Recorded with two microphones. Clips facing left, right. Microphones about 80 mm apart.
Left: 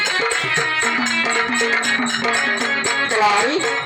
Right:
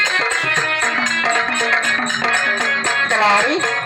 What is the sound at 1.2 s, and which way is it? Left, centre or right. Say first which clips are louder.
Music: right 2 dB; right.